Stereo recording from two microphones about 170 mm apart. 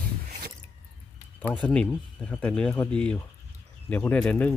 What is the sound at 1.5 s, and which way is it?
Speech, 5° left (ahead or behind).